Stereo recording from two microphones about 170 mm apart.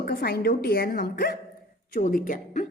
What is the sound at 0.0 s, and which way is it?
A woman's voice, 60° left (ahead or behind).